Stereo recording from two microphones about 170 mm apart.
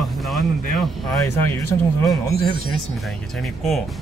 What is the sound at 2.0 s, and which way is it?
Speech, 20° left (ahead or behind).